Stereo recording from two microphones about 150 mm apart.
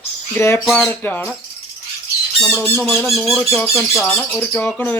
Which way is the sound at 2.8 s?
Centre (ahead or behind).